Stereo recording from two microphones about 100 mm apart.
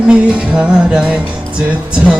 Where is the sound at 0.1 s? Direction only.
10° right (ahead or behind).